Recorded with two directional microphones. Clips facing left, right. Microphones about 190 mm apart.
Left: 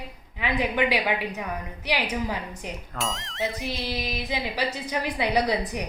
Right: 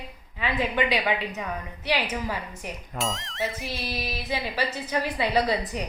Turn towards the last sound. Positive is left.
turn(degrees=15)  # may be behind; listen again after turning